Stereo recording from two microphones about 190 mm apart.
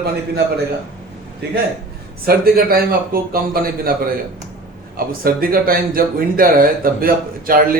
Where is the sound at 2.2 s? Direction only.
50° right (ahead or behind).